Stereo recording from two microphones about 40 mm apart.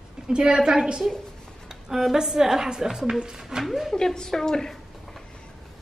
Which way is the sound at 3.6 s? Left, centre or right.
Centre.